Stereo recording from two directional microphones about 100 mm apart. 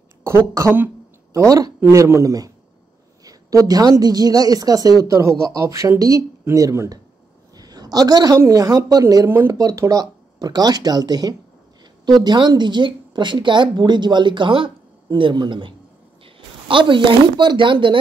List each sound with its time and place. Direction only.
0.6 s a woman's voice: 25° right (ahead or behind)
7.5 s a sound: 40° right (ahead or behind)
8.4 s a woman's voice: 35° right (ahead or behind); by 17.9 s 55° right (ahead or behind)